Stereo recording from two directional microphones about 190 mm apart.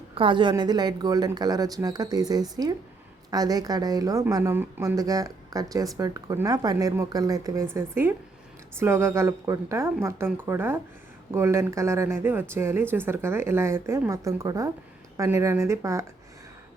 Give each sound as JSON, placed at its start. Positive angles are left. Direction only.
{"t": 0.1, "sound": "a woman's voice", "side_deg": -25}